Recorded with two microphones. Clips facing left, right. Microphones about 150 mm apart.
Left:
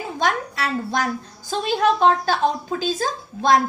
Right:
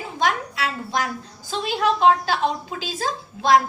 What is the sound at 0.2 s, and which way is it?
A woman's voice, 45° left (ahead or behind).